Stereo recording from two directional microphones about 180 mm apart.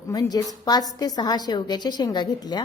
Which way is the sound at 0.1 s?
20° left (ahead or behind).